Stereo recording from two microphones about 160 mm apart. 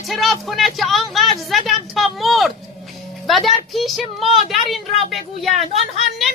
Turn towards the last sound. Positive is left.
turn(degrees=0)  # may be behind; listen again after turning